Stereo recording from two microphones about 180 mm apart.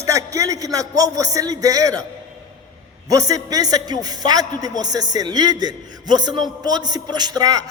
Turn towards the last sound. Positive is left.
turn(degrees=-20)  # may be behind; listen again after turning